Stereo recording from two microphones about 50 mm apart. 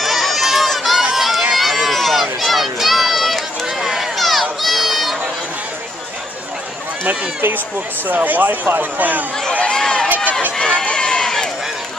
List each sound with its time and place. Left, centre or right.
0.0 s run: centre
8.1 s speech: right
9.5 s a sound: left
9.8 s run: centre